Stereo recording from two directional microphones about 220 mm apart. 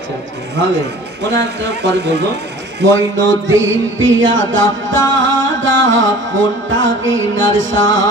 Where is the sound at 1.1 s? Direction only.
50° right (ahead or behind).